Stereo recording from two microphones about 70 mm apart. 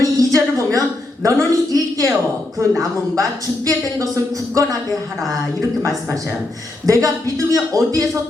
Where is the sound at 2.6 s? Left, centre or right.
Right.